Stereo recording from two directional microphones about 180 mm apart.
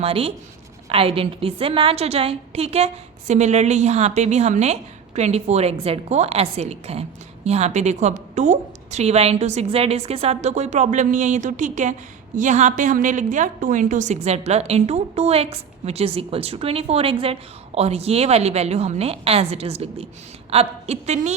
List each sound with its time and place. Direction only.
0.0 s a woman's voice: 30° right (ahead or behind)